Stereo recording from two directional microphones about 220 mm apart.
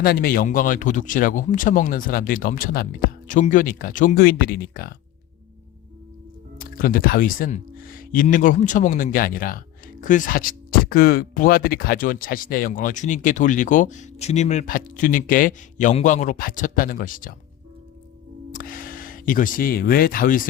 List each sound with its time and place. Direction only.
0.0 s speech: 45° left (ahead or behind)
6.6 s speech: 40° left (ahead or behind)
18.5 s speech: 40° left (ahead or behind)